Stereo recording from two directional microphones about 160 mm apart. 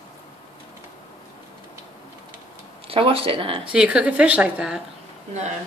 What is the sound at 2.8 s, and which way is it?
Speech, 35° right (ahead or behind).